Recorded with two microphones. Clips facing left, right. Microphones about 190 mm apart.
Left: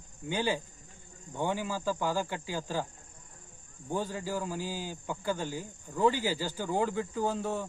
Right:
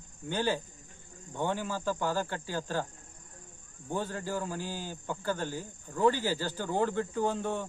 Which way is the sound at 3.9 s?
10° left (ahead or behind).